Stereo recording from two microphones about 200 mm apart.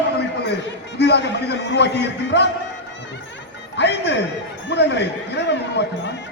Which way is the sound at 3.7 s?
60° left (ahead or behind).